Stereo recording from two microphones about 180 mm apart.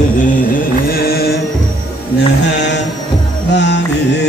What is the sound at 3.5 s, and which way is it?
Music, 70° left (ahead or behind).